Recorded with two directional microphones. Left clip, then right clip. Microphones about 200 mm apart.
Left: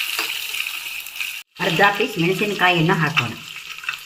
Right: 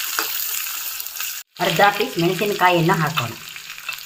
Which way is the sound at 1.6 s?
30° right (ahead or behind).